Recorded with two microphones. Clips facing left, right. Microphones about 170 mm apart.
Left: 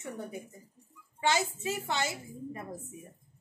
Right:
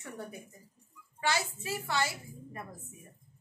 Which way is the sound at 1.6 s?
20° left (ahead or behind).